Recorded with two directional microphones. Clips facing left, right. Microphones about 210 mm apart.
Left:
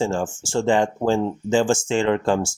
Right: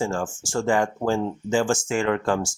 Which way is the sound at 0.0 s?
25° left (ahead or behind).